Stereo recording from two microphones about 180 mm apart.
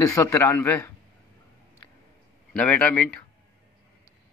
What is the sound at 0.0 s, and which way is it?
Speech, 15° left (ahead or behind).